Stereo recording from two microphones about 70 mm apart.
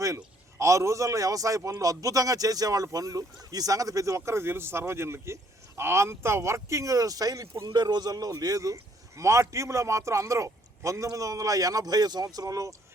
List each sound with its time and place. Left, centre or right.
0.6 s speech: right
4.1 s speech: right
7.7 s speech: right